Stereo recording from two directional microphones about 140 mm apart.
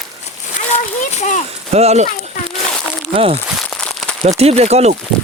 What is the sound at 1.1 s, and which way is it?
Speech, 55° left (ahead or behind).